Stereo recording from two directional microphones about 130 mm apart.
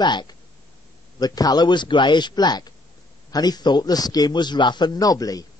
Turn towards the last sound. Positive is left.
turn(degrees=30)  # may be behind; listen again after turning